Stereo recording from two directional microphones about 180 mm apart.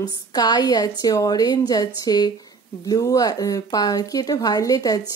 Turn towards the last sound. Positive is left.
turn(degrees=20)  # may be behind; listen again after turning